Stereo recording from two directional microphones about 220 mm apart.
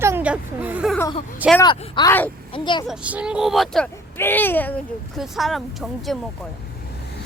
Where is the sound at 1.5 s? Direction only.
20° left (ahead or behind).